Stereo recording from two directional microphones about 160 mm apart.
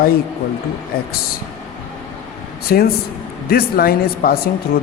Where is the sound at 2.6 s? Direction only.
70° left (ahead or behind).